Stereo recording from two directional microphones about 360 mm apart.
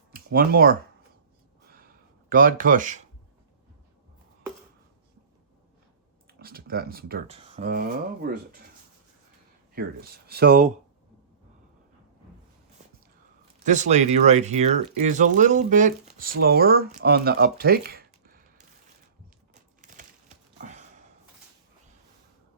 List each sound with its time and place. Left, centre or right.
0.1 s speech: right
1.6 s a sound: right
2.3 s speech: right
6.4 s speech: right
9.7 s speech: right
13.7 s speech: centre
19.8 s a sound: right